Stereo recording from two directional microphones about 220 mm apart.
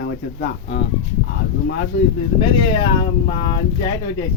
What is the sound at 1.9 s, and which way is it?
Speech, 55° left (ahead or behind).